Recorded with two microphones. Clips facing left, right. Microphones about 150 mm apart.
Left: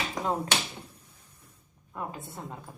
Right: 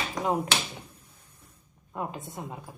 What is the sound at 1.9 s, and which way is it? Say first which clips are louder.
Speech: right 3 dB; 15° right (ahead or behind).